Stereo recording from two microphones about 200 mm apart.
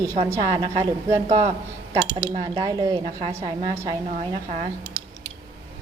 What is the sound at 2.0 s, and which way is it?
Speech, 20° right (ahead or behind).